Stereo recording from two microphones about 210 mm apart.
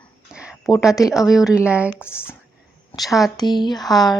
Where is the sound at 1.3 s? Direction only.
5° right (ahead or behind).